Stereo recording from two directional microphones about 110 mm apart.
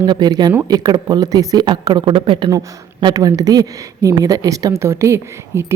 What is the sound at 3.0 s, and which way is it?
A woman's voice, 35° right (ahead or behind).